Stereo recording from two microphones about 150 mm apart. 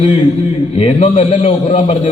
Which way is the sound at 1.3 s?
35° left (ahead or behind).